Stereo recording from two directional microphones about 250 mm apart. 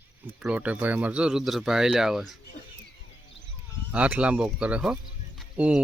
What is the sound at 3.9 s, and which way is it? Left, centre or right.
Speech, centre.